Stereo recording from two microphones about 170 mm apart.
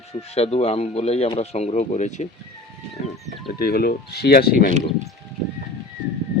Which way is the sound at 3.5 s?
60° left (ahead or behind).